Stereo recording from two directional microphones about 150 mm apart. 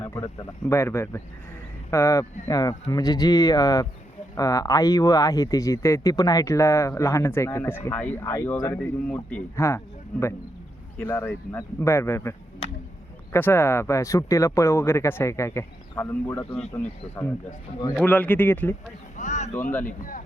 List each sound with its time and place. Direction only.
0.0 s speech: 20° left (ahead or behind)
13.3 s speech: 15° left (ahead or behind)
19.1 s a sound: 55° left (ahead or behind)